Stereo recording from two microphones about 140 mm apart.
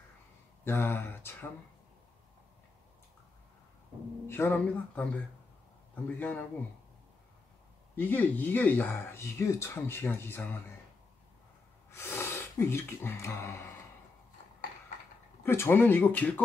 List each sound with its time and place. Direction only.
0.7 s speech: 15° left (ahead or behind)
4.3 s speech: 15° left (ahead or behind)
6.0 s speech: 15° left (ahead or behind)
7.9 s speech: 15° left (ahead or behind)
11.9 s speech: 20° left (ahead or behind)
15.4 s speech: 15° left (ahead or behind)